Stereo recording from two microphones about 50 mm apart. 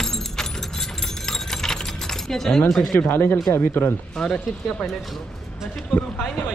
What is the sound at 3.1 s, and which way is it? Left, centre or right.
Speech, left.